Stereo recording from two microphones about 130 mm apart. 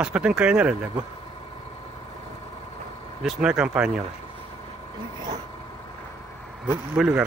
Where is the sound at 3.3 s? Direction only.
5° right (ahead or behind).